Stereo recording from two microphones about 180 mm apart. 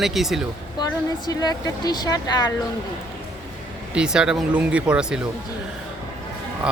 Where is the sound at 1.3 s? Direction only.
20° left (ahead or behind).